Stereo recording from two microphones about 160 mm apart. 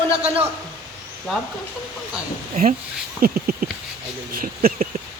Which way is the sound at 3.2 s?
65° right (ahead or behind).